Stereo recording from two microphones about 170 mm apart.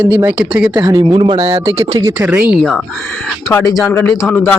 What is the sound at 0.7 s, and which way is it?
Speech, 20° right (ahead or behind).